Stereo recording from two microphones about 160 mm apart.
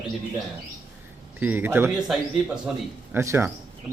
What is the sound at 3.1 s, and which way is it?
Speech, 15° right (ahead or behind).